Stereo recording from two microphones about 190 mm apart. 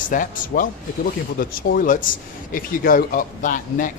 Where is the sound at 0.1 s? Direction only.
45° left (ahead or behind).